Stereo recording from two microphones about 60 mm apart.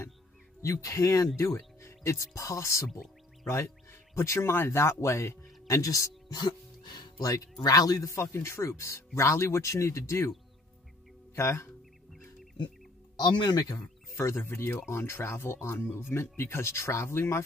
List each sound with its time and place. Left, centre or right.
0.6 s speech: left
8.1 s speech: left
11.3 s speech: left
13.2 s speech: left
14.1 s speech: left